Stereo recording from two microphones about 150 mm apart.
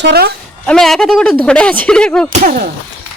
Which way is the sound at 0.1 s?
90° right.